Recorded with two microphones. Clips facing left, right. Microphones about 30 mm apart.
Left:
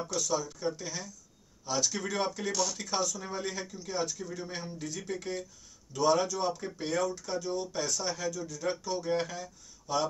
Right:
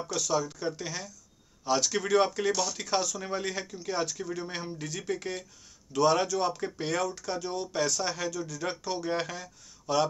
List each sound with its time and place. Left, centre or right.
0.3 s speech: right